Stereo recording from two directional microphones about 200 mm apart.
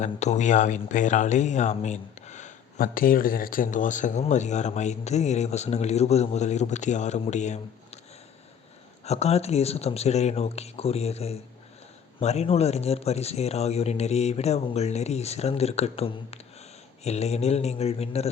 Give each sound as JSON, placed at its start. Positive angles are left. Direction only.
{"t": 0.0, "sound": "speech", "side_deg": 35}
{"t": 9.0, "sound": "speech", "side_deg": 30}